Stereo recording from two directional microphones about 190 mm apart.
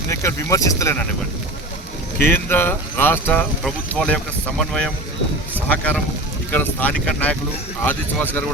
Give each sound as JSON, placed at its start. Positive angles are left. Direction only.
{"t": 0.1, "sound": "speech", "side_deg": 15}
{"t": 2.2, "sound": "speech", "side_deg": 10}